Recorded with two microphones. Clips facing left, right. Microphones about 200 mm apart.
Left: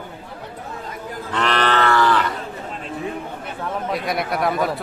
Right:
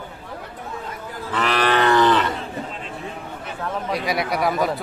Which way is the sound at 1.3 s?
5° right (ahead or behind).